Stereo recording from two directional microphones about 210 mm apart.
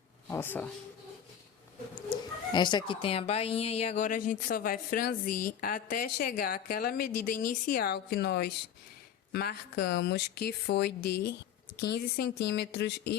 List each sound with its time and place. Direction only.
0.3 s speech: 10° left (ahead or behind)
2.0 s speech: 20° left (ahead or behind); by 13.1 s 55° left (ahead or behind)